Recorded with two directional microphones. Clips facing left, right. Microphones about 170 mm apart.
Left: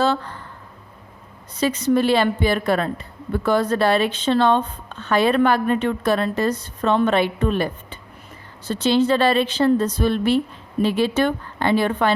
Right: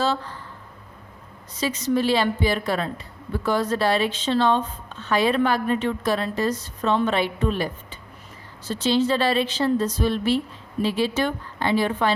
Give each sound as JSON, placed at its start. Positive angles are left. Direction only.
{"t": 0.0, "sound": "speech", "side_deg": 55}
{"t": 1.5, "sound": "a woman's voice", "side_deg": 60}